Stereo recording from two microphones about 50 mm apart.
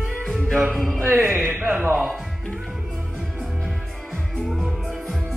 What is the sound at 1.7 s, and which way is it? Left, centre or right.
Speech, right.